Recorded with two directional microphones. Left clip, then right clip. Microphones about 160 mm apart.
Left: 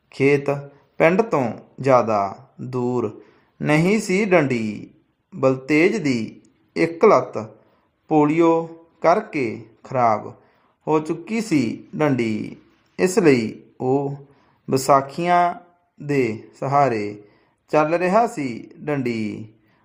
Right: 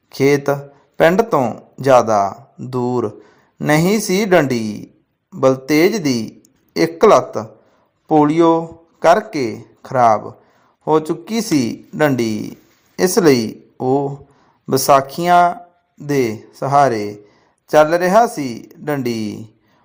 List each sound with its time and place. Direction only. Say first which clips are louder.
0.2 s a man's voice: right 4 dB; 15° right (ahead or behind)
8.0 s a man's voice: right 4 dB; 15° right (ahead or behind)